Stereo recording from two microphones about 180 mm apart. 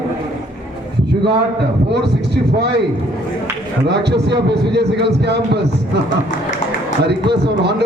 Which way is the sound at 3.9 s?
70° right (ahead or behind).